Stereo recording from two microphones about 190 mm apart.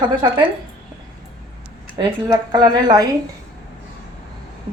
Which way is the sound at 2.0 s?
20° right (ahead or behind).